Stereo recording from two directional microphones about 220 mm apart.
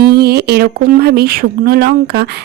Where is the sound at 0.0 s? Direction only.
45° right (ahead or behind).